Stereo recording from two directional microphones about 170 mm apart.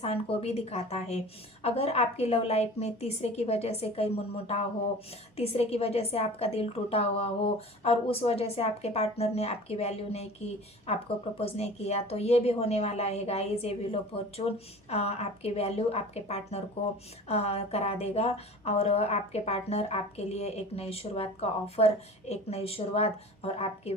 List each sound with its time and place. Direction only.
0.0 s a woman's voice: 35° left (ahead or behind)